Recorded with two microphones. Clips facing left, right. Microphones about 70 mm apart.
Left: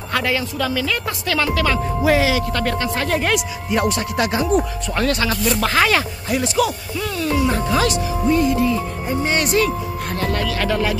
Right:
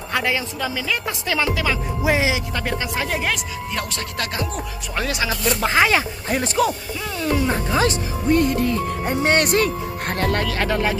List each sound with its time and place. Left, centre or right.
0.1 s speech: centre
3.7 s speech: centre
4.9 s speech: centre
6.2 s speech: right
7.2 s speech: right
8.3 s speech: right
10.6 s speech: right